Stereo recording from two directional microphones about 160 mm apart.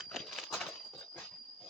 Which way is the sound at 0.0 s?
Centre (ahead or behind).